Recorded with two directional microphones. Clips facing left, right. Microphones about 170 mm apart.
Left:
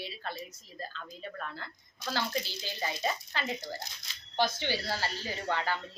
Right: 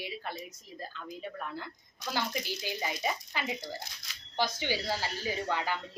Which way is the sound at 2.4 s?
15° right (ahead or behind).